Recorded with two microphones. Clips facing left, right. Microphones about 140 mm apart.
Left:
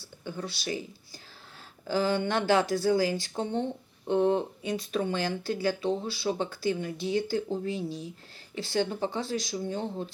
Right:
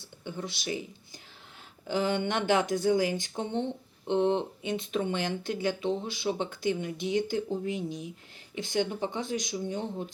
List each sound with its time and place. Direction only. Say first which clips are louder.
0.0 s speech: left 1 dB; 20° right (ahead or behind)